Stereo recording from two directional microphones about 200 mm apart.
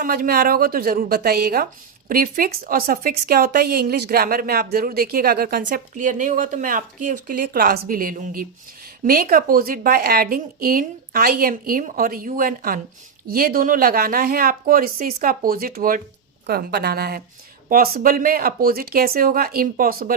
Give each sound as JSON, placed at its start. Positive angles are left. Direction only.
{"t": 0.0, "sound": "a woman's voice", "side_deg": -50}